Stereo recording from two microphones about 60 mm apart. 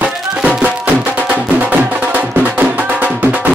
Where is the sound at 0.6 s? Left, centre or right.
Right.